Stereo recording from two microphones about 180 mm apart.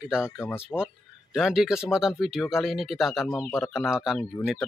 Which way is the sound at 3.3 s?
10° left (ahead or behind).